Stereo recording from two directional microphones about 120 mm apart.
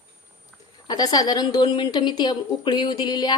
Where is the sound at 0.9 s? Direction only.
35° left (ahead or behind).